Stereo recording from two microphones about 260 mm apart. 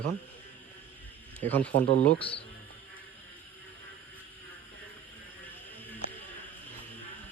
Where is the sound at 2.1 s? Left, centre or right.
Left.